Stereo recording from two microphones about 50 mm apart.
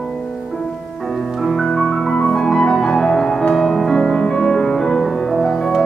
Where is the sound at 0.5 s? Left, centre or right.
Centre.